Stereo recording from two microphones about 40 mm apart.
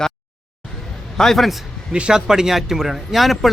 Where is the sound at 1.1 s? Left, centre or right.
Centre.